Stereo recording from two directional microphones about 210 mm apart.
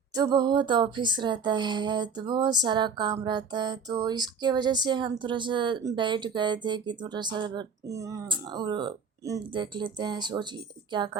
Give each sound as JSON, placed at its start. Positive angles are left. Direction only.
{"t": 0.1, "sound": "speech", "side_deg": -20}